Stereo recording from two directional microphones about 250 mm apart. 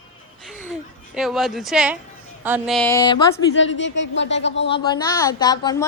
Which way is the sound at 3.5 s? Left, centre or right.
Left.